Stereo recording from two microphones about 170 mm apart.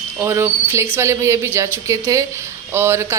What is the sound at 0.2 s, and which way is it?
A woman's voice, 15° right (ahead or behind).